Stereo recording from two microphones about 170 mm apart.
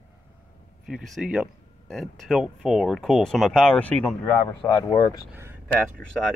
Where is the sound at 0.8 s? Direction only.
Centre (ahead or behind); by 4.9 s 15° left (ahead or behind).